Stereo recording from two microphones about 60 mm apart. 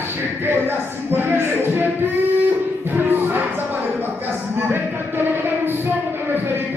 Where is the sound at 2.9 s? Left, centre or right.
Right.